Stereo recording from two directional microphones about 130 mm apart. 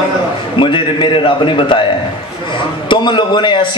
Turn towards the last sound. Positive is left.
turn(degrees=35)  # may be behind; listen again after turning